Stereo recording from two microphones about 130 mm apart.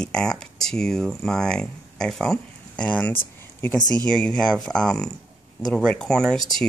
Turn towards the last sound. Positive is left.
turn(degrees=5)  # may be behind; listen again after turning